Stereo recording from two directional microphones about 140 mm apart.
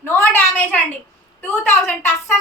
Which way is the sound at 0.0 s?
15° left (ahead or behind).